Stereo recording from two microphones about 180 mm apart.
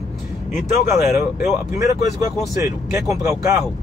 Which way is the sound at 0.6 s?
40° left (ahead or behind).